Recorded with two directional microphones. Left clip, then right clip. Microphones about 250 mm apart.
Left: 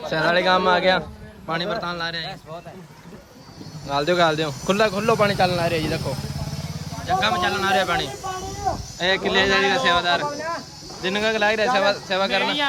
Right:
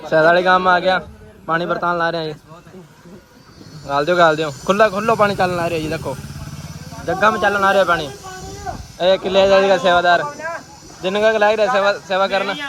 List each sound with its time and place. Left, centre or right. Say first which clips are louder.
0.0 s speech: right 7 dB; centre
3.8 s speech: right 5 dB; centre
8.2 s snake: left 3 dB; left
9.0 s speech: right 7 dB; centre
10.2 s speech: right 1 dB; centre
11.0 s speech: right 6 dB; centre